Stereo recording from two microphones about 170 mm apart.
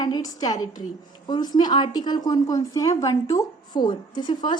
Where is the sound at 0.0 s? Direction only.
25° left (ahead or behind).